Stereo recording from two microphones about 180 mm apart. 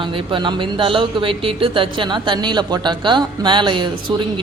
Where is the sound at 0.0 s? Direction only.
25° right (ahead or behind).